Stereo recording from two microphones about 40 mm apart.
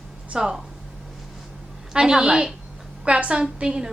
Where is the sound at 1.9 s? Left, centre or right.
Centre.